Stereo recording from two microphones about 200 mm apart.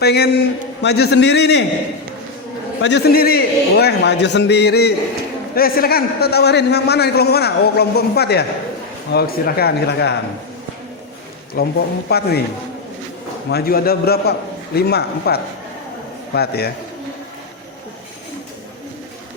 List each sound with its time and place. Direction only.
0.0 s a man's voice: 55° left (ahead or behind)
2.8 s a man's voice: 55° left (ahead or behind)
11.5 s a man's voice: 50° left (ahead or behind)
13.5 s a man's voice: 50° left (ahead or behind)